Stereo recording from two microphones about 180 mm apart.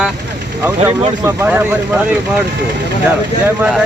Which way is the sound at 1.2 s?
10° right (ahead or behind).